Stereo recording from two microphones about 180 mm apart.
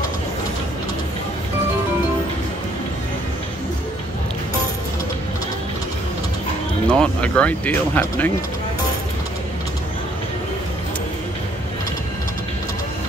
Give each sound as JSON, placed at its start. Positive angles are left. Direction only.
{"t": 6.9, "sound": "speech", "side_deg": 5}